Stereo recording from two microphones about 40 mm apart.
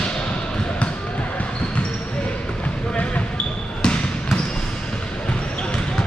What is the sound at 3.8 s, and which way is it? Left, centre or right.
Basketball bounce, left.